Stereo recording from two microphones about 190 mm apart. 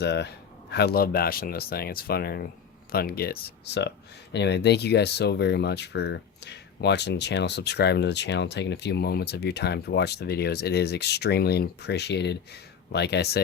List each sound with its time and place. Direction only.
0.0 s speech: 60° left (ahead or behind)